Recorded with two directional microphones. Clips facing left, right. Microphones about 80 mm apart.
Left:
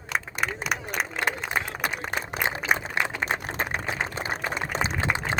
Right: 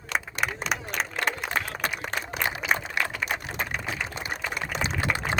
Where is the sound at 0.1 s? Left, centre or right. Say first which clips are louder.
Even; centre.